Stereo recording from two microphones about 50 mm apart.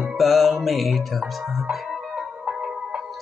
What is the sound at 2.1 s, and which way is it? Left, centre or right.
Music, centre.